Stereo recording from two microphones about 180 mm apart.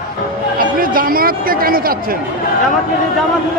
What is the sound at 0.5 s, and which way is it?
Speech, 55° right (ahead or behind).